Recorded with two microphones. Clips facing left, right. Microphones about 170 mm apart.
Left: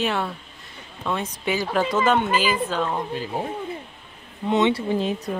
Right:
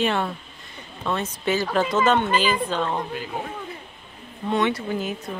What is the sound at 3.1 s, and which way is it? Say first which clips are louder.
Speech: left 3 dB; 30° left (ahead or behind).